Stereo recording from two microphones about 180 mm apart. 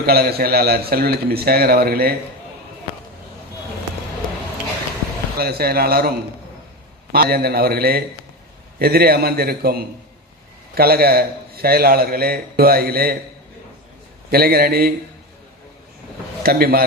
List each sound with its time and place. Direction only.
0.0 s a man's voice: 60° right (ahead or behind)
5.4 s a man's voice: 60° right (ahead or behind)
14.3 s a man's voice: 60° right (ahead or behind)
16.4 s a man's voice: 55° right (ahead or behind)